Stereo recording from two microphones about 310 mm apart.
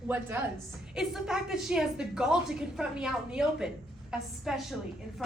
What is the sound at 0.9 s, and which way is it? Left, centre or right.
A woman's voice, centre.